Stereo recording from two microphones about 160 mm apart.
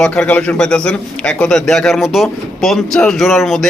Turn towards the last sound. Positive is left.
turn(degrees=0)  # may be behind; listen again after turning